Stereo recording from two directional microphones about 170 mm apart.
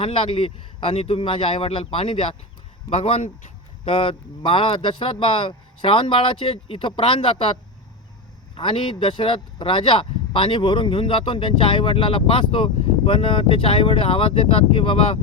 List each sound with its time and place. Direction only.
0.0 s speech: 30° left (ahead or behind)
8.5 s speech: 30° left (ahead or behind)